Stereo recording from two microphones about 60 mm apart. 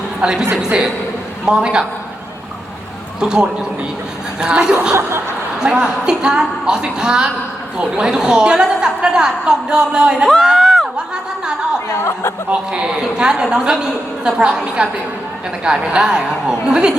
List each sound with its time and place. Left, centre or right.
0.2 s a woman's voice: centre
3.2 s a woman's voice: centre
10.2 s a sound: centre
11.9 s chatter: left
12.5 s a woman's voice: centre